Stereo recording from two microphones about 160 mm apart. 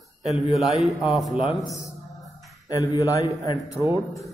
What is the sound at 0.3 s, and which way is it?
A man's voice, centre (ahead or behind).